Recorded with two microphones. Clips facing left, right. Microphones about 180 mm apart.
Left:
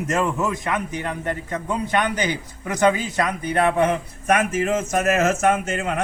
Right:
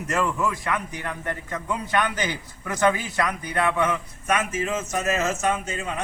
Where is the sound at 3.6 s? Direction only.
35° left (ahead or behind).